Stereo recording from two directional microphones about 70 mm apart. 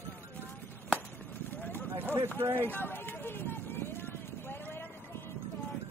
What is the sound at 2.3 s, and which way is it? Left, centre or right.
Speech, right.